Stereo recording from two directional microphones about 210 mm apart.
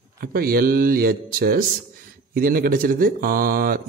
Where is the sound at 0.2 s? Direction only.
45° right (ahead or behind).